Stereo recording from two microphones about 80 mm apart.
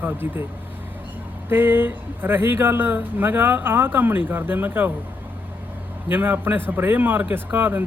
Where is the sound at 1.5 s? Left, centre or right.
Right.